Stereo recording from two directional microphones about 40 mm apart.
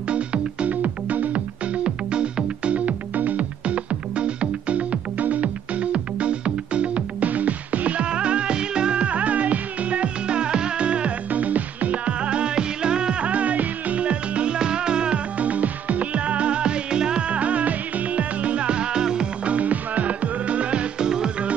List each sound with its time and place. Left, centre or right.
0.1 s music: right
1.8 s music: right
15.3 s music: right; by 19.2 s centre
19.4 s music: right
21.0 s music: centre